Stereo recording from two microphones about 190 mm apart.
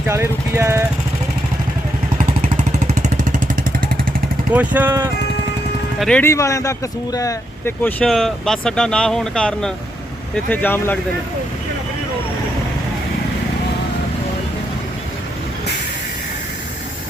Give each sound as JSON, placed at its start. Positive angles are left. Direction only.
{"t": 0.1, "sound": "speech", "side_deg": -15}
{"t": 2.4, "sound": "vehicle", "side_deg": -35}
{"t": 4.5, "sound": "speech", "side_deg": -10}
{"t": 6.0, "sound": "speech", "side_deg": 5}